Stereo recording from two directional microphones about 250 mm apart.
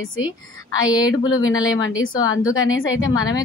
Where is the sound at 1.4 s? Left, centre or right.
Left.